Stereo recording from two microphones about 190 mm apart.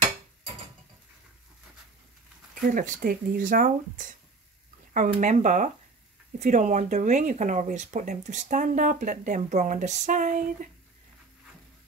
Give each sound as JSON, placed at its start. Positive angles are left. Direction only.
{"t": 2.7, "sound": "speech", "side_deg": -45}
{"t": 5.2, "sound": "speech", "side_deg": -40}